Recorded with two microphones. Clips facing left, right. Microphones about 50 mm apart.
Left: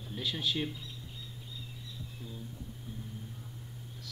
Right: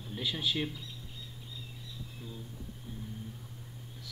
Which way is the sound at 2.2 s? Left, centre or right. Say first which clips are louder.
Even; centre.